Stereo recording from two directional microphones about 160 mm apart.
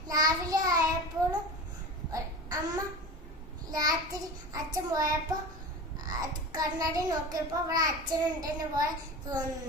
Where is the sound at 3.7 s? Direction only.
25° right (ahead or behind).